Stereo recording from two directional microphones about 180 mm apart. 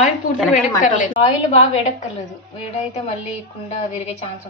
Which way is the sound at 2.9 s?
40° left (ahead or behind).